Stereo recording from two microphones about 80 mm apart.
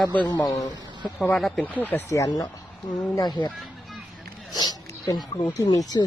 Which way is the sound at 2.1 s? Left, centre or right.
Left.